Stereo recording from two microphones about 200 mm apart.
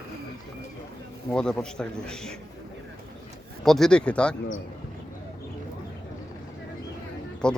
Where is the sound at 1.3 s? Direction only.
5° left (ahead or behind).